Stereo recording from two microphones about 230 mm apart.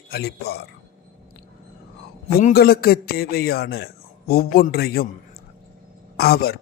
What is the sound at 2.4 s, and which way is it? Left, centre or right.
A man's voice, left.